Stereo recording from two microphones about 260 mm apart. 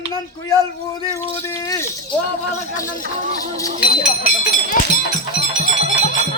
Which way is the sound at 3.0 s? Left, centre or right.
Right.